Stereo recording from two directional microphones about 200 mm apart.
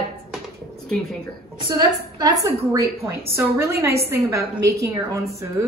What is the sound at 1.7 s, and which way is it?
A woman's voice, 20° right (ahead or behind).